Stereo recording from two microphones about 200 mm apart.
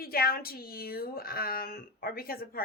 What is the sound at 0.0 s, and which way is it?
Speech, 50° left (ahead or behind).